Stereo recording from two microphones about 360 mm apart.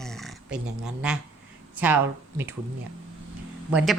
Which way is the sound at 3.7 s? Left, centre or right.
Centre.